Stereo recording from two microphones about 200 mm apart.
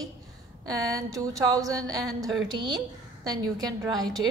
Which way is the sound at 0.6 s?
15° right (ahead or behind).